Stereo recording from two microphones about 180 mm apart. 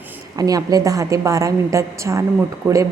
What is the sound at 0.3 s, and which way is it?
A woman's voice, 20° right (ahead or behind).